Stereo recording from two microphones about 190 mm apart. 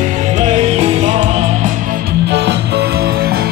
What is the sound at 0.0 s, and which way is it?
Music, 35° right (ahead or behind).